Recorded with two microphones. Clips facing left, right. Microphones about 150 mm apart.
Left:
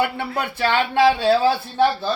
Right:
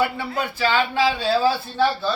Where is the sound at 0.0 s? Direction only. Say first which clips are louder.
Even; 60° left (ahead or behind).